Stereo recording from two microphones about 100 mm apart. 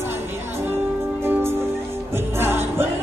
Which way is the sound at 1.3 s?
25° right (ahead or behind).